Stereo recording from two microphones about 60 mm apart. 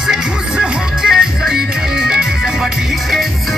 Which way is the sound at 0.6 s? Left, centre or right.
Centre.